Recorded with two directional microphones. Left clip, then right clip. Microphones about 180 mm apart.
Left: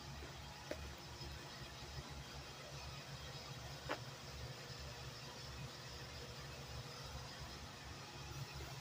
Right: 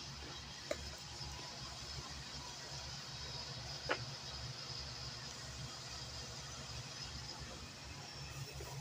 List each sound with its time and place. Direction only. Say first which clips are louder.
3.9 s vehicle: right 6 dB; 65° right (ahead or behind)